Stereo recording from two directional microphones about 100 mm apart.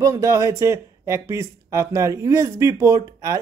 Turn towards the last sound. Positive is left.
turn(degrees=-35)  # may be behind; listen again after turning